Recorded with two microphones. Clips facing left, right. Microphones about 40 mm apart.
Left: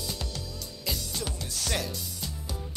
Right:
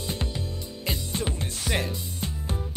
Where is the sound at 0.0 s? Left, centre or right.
Right.